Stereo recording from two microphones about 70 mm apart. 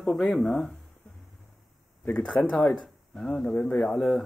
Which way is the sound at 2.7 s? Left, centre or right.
Centre.